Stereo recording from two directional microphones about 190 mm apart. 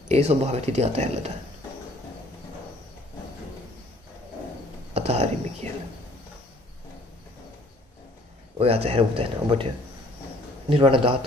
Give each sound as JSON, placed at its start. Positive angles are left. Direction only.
{"t": 0.1, "sound": "speech", "side_deg": -35}
{"t": 4.9, "sound": "speech", "side_deg": -35}
{"t": 8.5, "sound": "speech", "side_deg": -30}
{"t": 10.7, "sound": "a man's voice", "side_deg": -25}